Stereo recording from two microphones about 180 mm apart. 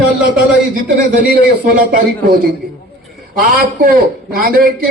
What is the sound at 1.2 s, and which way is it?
Speech, 50° right (ahead or behind).